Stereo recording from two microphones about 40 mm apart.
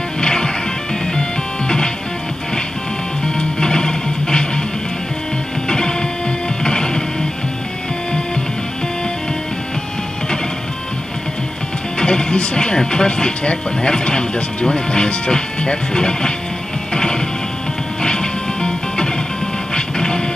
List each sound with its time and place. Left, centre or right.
0.2 s music: centre
3.3 s music: left
5.7 s printer: centre
6.6 s music: centre
12.0 s speech: left
16.9 s music: centre